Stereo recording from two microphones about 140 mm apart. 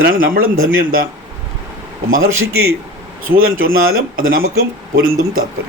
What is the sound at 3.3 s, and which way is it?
A man's voice, 90° right.